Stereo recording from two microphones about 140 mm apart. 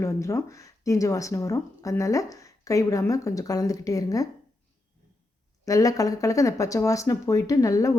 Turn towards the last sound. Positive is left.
turn(degrees=25)  # may be behind; listen again after turning